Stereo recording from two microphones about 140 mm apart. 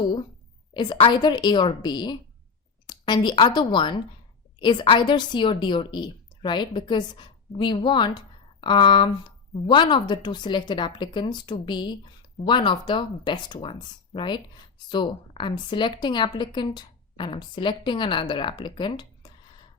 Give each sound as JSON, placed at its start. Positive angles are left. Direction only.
{"t": 0.7, "sound": "a woman's voice", "side_deg": 30}